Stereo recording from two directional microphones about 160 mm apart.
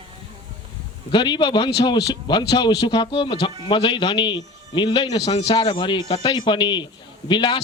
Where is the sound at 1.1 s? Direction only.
30° left (ahead or behind).